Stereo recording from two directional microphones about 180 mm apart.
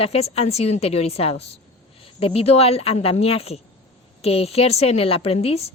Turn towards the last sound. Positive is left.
turn(degrees=35)  # may be behind; listen again after turning